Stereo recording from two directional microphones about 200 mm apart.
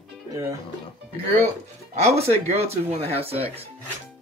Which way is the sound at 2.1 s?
30° right (ahead or behind).